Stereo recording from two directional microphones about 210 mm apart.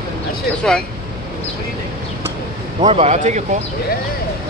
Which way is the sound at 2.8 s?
30° right (ahead or behind).